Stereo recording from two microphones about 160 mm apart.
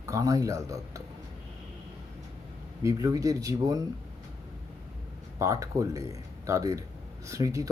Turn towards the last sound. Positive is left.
turn(degrees=-20)  # may be behind; listen again after turning